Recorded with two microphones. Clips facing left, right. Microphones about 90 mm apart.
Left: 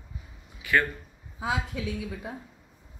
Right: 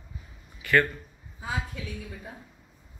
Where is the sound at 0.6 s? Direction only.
10° left (ahead or behind).